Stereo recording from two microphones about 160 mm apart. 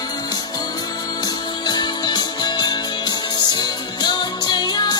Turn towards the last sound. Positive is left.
turn(degrees=25)  # may be behind; listen again after turning